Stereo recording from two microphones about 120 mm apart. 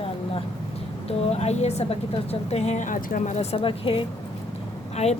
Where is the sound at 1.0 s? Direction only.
65° left (ahead or behind); by 4.0 s 45° left (ahead or behind).